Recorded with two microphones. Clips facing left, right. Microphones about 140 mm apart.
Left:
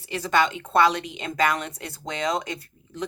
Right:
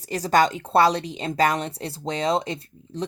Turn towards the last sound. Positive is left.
turn(degrees=-30)  # may be behind; listen again after turning